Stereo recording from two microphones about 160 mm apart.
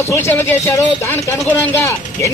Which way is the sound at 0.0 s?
15° left (ahead or behind).